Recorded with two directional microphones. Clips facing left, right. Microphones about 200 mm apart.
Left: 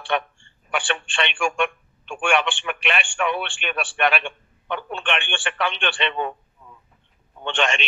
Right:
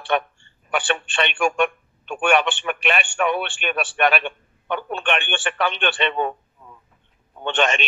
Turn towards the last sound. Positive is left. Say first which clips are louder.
# right 3 dB
turn(degrees=-45)  # may be behind; listen again after turning